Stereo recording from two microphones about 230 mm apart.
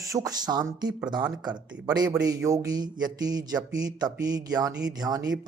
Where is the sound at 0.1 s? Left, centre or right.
Centre.